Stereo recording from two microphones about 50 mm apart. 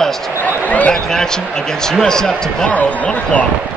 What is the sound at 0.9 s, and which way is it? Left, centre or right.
Speech, centre.